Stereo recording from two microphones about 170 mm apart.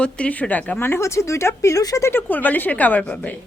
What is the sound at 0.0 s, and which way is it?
A woman's voice, 10° left (ahead or behind).